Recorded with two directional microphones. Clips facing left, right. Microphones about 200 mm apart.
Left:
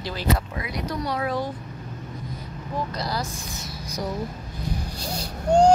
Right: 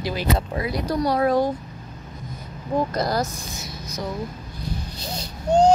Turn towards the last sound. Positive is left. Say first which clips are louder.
# even
turn(degrees=10)  # may be behind; listen again after turning